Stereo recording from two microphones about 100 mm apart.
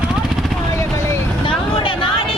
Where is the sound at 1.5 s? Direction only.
60° left (ahead or behind).